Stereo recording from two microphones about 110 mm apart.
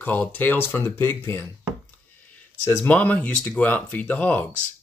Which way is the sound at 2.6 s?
15° left (ahead or behind).